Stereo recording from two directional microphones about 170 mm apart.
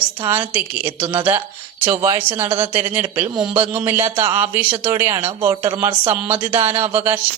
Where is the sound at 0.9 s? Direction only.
30° right (ahead or behind).